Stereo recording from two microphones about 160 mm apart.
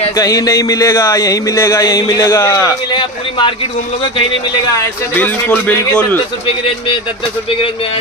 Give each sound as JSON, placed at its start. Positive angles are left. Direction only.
{"t": 0.1, "sound": "a sound", "side_deg": 20}
{"t": 2.9, "sound": "a man's voice", "side_deg": 30}
{"t": 4.7, "sound": "speech", "side_deg": 10}